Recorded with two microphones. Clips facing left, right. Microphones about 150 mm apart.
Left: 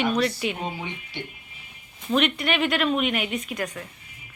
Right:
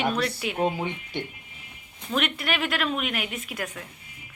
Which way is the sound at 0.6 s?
50° right (ahead or behind).